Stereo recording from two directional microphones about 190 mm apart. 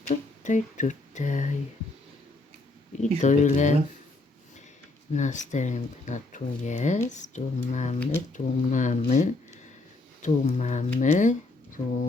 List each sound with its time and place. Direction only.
0.1 s speech: 40° left (ahead or behind)
3.2 s speech: 40° left (ahead or behind)
5.1 s speech: 40° left (ahead or behind)